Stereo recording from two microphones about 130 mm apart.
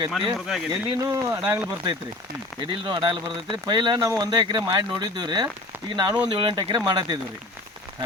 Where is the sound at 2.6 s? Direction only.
40° right (ahead or behind).